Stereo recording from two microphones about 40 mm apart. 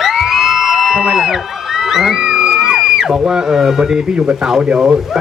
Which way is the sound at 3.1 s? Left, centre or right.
Centre.